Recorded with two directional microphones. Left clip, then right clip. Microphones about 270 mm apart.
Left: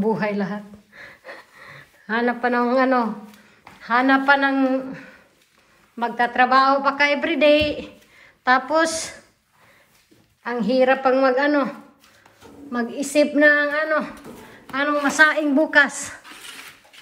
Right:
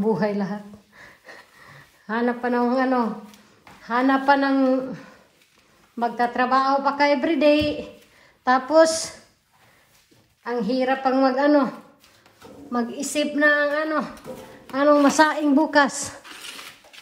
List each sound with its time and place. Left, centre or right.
0.1 s sniff: centre
3.8 s speech: centre
10.4 s speech: centre
12.7 s speech: centre
14.1 s speech: centre
14.7 s speech: centre